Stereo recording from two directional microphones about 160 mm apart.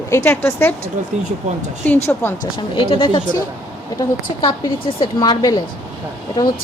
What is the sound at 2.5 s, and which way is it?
Speech, 30° left (ahead or behind).